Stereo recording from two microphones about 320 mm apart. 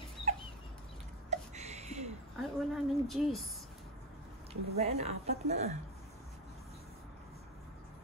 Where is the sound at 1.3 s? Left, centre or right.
Right.